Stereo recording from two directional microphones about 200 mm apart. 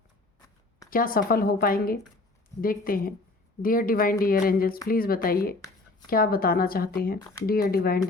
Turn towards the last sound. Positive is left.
turn(degrees=50)  # may be behind; listen again after turning